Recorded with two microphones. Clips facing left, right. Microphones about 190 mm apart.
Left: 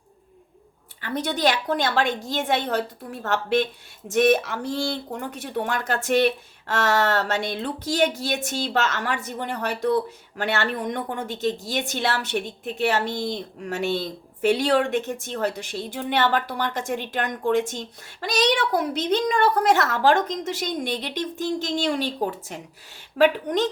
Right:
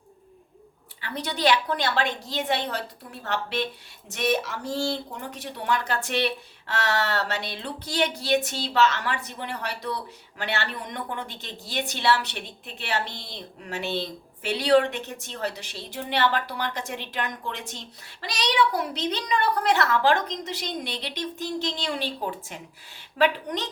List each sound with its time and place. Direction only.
1.0 s speech: 50° left (ahead or behind)